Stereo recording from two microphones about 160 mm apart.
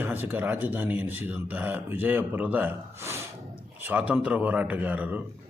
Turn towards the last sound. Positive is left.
turn(degrees=-10)  # may be behind; listen again after turning